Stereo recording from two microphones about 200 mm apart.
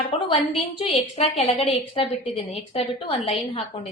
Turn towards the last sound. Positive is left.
turn(degrees=25)  # may be behind; listen again after turning